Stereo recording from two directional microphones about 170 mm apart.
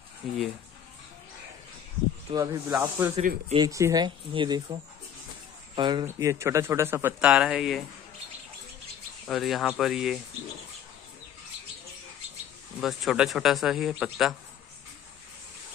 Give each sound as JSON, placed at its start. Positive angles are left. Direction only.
{"t": 0.2, "sound": "speech", "side_deg": 0}
{"t": 2.3, "sound": "speech", "side_deg": -20}
{"t": 3.2, "sound": "speech", "side_deg": -45}
{"t": 3.5, "sound": "speech", "side_deg": -20}
{"t": 5.8, "sound": "speech", "side_deg": -25}
{"t": 9.3, "sound": "speech", "side_deg": 0}
{"t": 12.8, "sound": "speech", "side_deg": 0}